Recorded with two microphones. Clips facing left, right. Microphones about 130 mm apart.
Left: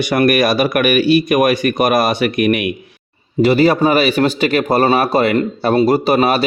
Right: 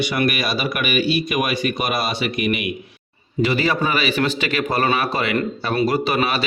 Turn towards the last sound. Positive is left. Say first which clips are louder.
# left 7 dB
turn(degrees=40)  # may be behind; listen again after turning